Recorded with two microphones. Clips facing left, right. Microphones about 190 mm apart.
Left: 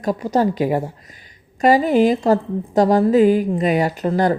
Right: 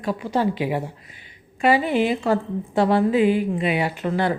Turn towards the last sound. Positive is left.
turn(degrees=40)  # may be behind; listen again after turning